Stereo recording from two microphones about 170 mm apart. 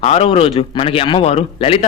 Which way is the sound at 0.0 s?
40° left (ahead or behind).